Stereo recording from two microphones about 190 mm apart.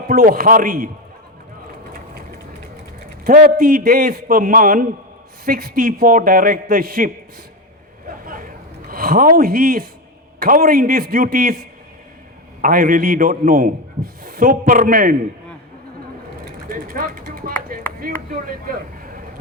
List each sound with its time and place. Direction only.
0.1 s a man's voice: 50° right (ahead or behind)
3.6 s a man's voice: 50° right (ahead or behind)
8.2 s a sound: 45° right (ahead or behind)
10.4 s a man's voice: 50° right (ahead or behind)
12.6 s a man's voice: 45° right (ahead or behind)
16.5 s mechanisms: 50° right (ahead or behind)
18.0 s speech: 50° right (ahead or behind)